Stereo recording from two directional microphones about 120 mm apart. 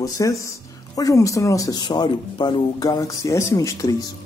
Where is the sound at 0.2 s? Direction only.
30° left (ahead or behind).